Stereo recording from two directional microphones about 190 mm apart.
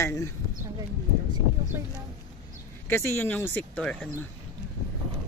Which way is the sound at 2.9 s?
10° left (ahead or behind).